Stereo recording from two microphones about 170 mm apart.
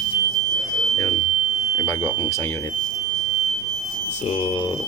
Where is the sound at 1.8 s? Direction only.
15° left (ahead or behind).